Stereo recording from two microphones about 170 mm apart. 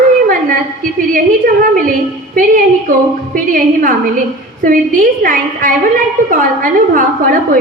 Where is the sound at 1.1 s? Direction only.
55° right (ahead or behind).